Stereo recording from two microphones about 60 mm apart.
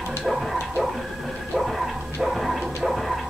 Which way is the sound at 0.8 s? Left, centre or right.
Centre.